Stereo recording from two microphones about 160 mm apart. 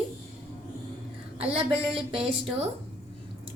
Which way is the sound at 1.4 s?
40° right (ahead or behind).